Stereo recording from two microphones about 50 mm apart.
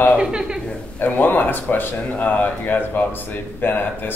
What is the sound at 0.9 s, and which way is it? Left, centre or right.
Speech, left.